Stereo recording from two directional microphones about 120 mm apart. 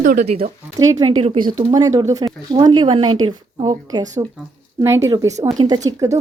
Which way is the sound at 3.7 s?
35° right (ahead or behind).